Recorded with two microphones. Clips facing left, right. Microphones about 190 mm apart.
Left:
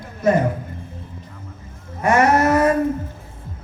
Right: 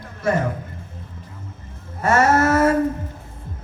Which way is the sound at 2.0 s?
15° left (ahead or behind).